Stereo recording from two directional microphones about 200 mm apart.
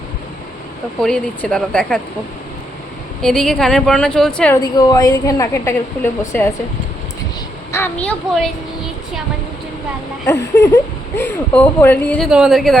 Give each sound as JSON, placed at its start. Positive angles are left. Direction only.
{"t": 1.0, "sound": "speech", "side_deg": 5}
{"t": 3.2, "sound": "speech", "side_deg": 5}
{"t": 4.6, "sound": "a woman's voice", "side_deg": 20}
{"t": 7.7, "sound": "a woman's voice", "side_deg": 10}
{"t": 10.2, "sound": "a woman's voice", "side_deg": 15}